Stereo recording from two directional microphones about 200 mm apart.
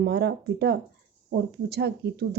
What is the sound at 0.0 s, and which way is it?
Speech, 55° right (ahead or behind).